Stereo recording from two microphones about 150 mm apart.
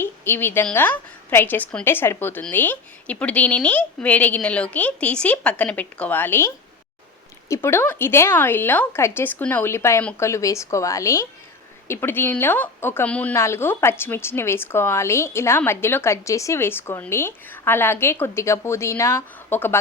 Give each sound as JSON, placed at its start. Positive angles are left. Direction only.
{"t": 0.0, "sound": "a woman's voice", "side_deg": 15}